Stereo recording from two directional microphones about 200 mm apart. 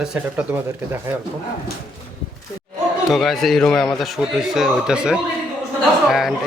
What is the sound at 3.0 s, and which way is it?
Speech, centre (ahead or behind).